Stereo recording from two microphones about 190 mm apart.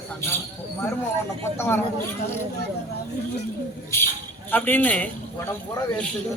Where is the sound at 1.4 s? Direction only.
10° left (ahead or behind).